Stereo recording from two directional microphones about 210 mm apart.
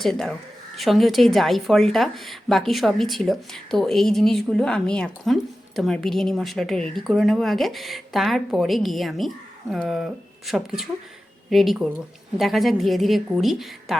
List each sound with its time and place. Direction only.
0.0 s a woman's voice: centre (ahead or behind)